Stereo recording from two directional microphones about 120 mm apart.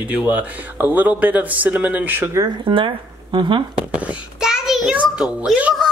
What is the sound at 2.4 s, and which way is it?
Speech, 45° right (ahead or behind).